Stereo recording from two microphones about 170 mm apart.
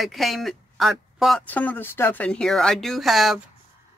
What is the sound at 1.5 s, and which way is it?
Speech, 10° left (ahead or behind).